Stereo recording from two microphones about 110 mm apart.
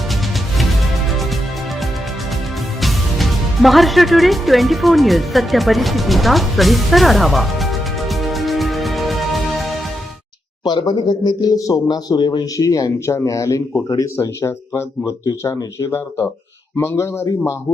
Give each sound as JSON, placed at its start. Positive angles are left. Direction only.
{"t": 0.1, "sound": "music", "side_deg": 0}
{"t": 2.8, "sound": "music", "side_deg": 0}
{"t": 10.6, "sound": "a man's voice", "side_deg": 40}